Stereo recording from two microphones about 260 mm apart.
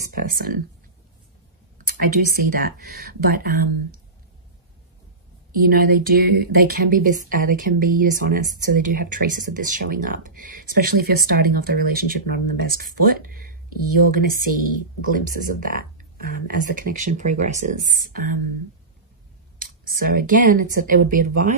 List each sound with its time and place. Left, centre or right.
0.1 s speech: right
1.9 s speech: right
5.5 s speech: right
19.6 s speech: right